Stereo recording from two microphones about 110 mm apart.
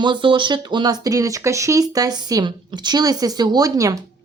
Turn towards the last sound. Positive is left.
turn(degrees=-30)  # may be behind; listen again after turning